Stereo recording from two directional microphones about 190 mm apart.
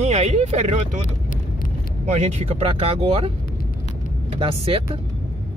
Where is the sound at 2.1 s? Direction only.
35° right (ahead or behind).